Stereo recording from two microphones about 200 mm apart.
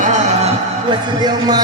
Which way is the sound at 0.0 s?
35° right (ahead or behind).